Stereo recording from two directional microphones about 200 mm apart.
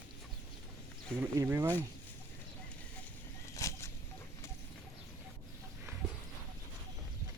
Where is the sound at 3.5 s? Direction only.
15° left (ahead or behind).